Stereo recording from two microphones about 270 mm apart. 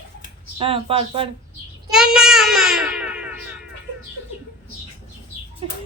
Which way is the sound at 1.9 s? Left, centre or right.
Centre.